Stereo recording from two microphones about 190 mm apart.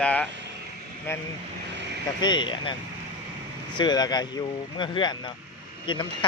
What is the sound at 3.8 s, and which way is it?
Speech, 20° left (ahead or behind).